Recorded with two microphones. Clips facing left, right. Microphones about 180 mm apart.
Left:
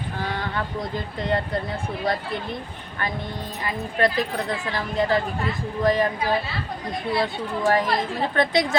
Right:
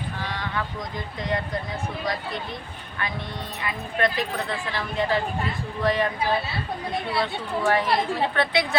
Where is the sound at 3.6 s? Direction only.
35° left (ahead or behind).